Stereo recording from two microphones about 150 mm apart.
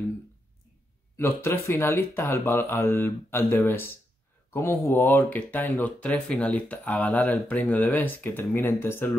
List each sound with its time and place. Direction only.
1.1 s speech: 15° left (ahead or behind)